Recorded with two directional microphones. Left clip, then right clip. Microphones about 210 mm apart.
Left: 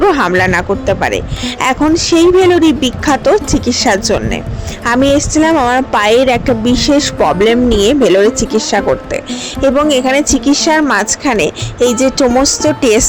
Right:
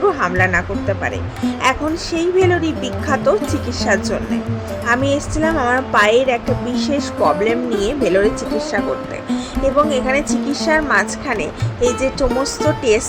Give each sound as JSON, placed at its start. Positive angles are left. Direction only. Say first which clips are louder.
{"t": 0.1, "sound": "a woman's voice", "louder": "left 6 dB", "side_deg": 40}
{"t": 9.9, "sound": "a woman's voice", "louder": "left 7 dB", "side_deg": 40}